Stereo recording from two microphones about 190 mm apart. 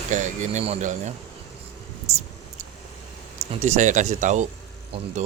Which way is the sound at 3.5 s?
40° right (ahead or behind).